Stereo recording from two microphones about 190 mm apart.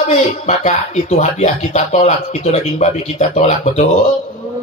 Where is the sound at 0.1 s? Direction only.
35° left (ahead or behind).